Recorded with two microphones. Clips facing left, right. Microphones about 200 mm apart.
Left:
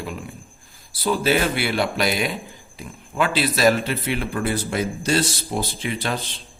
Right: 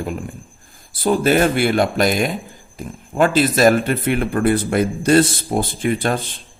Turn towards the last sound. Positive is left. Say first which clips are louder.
# right 6 dB
turn(degrees=-50)  # may be behind; listen again after turning